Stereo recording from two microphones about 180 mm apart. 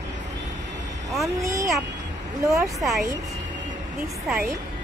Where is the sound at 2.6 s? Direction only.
Centre (ahead or behind).